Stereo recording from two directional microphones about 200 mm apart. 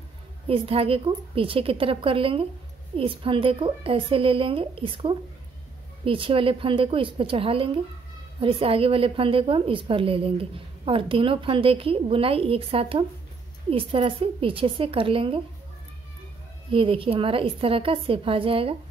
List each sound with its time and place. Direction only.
0.5 s a woman's voice: 30° right (ahead or behind)
16.7 s a woman's voice: 25° right (ahead or behind)